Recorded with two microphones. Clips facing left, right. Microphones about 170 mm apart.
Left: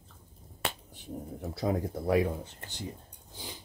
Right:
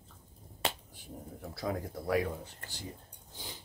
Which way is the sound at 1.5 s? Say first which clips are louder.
Left 5 dB; 25° left (ahead or behind).